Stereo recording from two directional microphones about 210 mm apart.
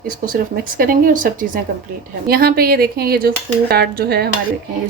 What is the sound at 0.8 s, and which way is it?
A woman's voice, 40° right (ahead or behind).